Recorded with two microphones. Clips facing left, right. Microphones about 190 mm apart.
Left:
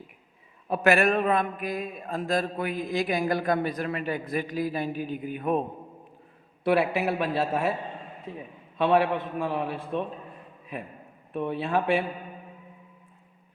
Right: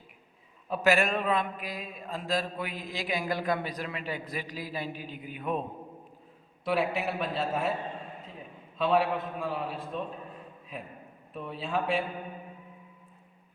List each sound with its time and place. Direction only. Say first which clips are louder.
0.7 s a man's voice: left 4 dB; 60° left (ahead or behind)
6.7 s a man's voice: left 5 dB; 65° left (ahead or behind)
8.8 s a man's voice: left 4 dB; 65° left (ahead or behind)
11.3 s a man's voice: left 6 dB; 65° left (ahead or behind)